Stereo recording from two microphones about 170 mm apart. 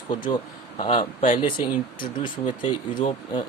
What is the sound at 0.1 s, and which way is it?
Speech, 30° left (ahead or behind).